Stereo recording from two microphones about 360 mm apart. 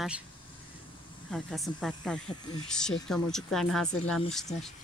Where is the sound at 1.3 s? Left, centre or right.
Centre.